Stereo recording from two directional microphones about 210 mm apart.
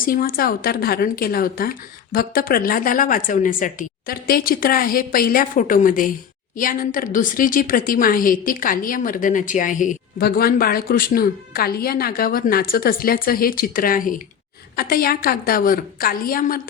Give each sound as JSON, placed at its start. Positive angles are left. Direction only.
{"t": 0.0, "sound": "a woman's voice", "side_deg": 45}